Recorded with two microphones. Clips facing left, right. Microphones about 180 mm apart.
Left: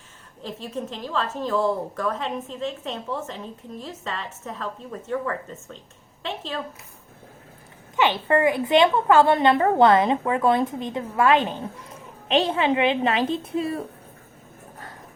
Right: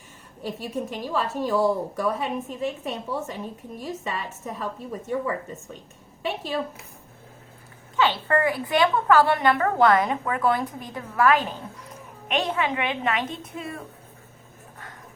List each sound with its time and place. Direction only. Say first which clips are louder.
0.4 s a woman's voice: right 1 dB; 10° right (ahead or behind)
7.9 s a woman's voice: left 2 dB; 20° left (ahead or behind)